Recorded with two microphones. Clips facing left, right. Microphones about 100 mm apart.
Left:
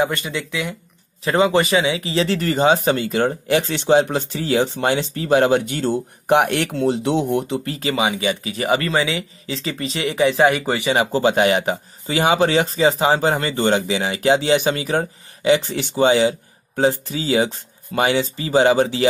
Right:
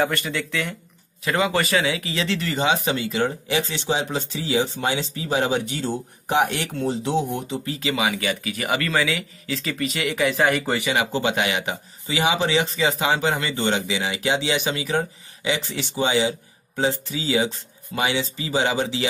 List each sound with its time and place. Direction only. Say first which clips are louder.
0.0 s speech: left 2 dB; 15° left (ahead or behind)
1.2 s speech: left 5 dB; 30° left (ahead or behind); by 7.7 s 65° left (ahead or behind)
7.8 s speech: left 3 dB; 30° left (ahead or behind)
10.9 s speech: left 7 dB; 35° left (ahead or behind)